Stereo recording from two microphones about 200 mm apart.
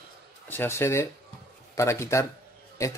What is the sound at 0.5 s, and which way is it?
Speech, 10° left (ahead or behind).